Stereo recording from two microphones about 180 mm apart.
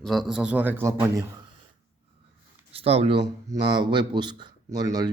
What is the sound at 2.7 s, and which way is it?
A man's voice, 35° right (ahead or behind).